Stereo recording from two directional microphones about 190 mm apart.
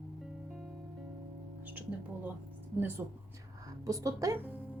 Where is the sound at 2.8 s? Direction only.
10° right (ahead or behind).